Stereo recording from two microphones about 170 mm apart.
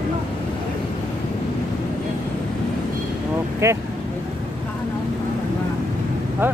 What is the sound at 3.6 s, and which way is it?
Speech, 15° right (ahead or behind).